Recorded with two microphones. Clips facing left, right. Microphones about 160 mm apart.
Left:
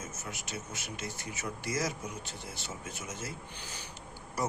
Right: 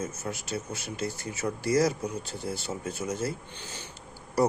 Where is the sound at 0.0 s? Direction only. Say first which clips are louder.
Right 8 dB; 35° right (ahead or behind).